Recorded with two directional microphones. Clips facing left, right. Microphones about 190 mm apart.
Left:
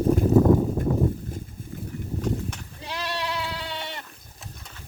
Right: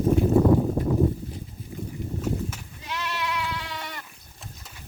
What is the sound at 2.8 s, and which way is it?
Sheep, 35° left (ahead or behind).